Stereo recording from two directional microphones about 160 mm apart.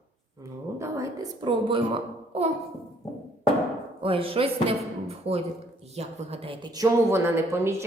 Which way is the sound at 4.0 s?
35° right (ahead or behind).